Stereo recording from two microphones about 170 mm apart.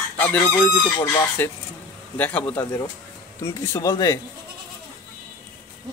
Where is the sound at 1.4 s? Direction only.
10° left (ahead or behind).